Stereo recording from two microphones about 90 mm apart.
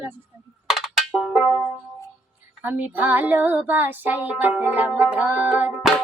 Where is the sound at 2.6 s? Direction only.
15° right (ahead or behind).